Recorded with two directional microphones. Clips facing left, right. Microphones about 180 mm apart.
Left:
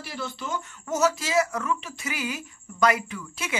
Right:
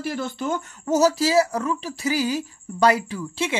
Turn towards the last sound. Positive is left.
turn(degrees=-30)  # may be behind; listen again after turning